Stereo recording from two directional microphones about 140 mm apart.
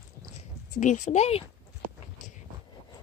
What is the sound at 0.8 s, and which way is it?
Speech, 60° left (ahead or behind).